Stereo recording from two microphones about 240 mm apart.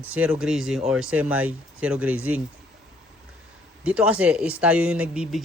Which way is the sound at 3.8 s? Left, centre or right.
Centre.